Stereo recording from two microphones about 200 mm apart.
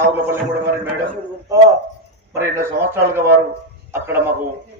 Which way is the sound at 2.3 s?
15° right (ahead or behind).